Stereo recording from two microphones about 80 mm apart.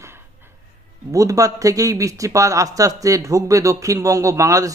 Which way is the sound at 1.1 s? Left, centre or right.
Right.